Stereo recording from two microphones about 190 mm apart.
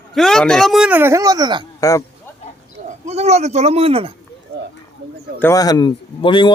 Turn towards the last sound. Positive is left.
turn(degrees=25)  # may be behind; listen again after turning